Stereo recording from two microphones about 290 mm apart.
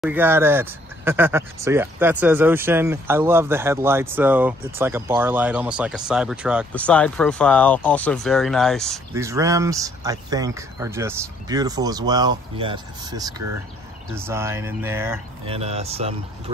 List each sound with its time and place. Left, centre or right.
0.0 s speech: centre
9.1 s speech: centre
15.4 s speech: centre